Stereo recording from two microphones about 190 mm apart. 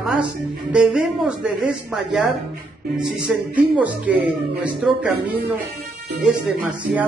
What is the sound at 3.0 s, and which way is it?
A woman's voice, 5° right (ahead or behind).